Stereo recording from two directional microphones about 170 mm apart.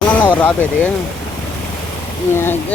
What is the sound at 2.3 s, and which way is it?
Speech, 15° left (ahead or behind).